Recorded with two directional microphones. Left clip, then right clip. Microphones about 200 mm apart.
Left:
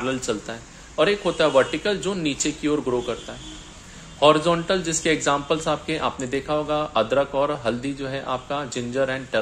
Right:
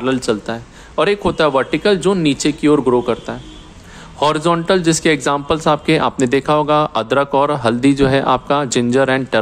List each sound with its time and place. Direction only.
0.0 s speech: 30° right (ahead or behind)